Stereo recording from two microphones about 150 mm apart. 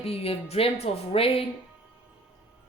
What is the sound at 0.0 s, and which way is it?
A woman's voice, 40° left (ahead or behind).